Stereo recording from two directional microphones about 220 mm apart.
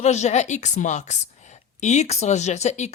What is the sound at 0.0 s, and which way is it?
Speech, 30° left (ahead or behind).